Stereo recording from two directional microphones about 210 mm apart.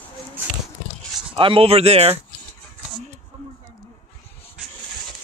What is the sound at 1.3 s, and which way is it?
Speech, 25° right (ahead or behind).